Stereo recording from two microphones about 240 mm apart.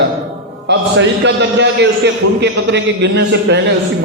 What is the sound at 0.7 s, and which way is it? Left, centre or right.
A man's voice, right.